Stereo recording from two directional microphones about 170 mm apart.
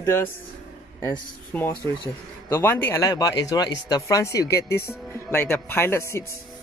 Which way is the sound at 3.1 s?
20° left (ahead or behind).